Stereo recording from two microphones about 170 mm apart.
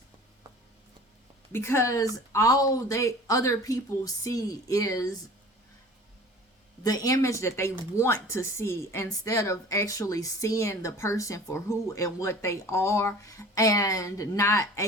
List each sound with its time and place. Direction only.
1.5 s speech: 15° left (ahead or behind)
6.8 s speech: 20° left (ahead or behind)